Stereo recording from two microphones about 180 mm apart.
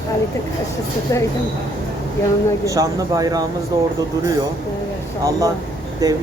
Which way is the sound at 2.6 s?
20° right (ahead or behind).